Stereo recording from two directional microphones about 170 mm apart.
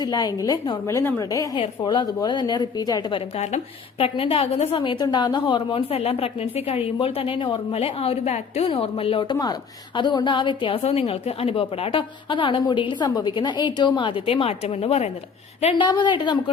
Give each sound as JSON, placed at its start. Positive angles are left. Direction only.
{"t": 0.0, "sound": "a woman's voice", "side_deg": 20}
{"t": 15.8, "sound": "a woman's voice", "side_deg": 25}